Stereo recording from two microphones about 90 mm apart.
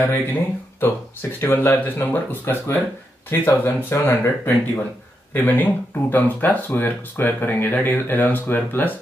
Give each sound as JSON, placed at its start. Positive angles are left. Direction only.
{"t": 0.1, "sound": "speech", "side_deg": 25}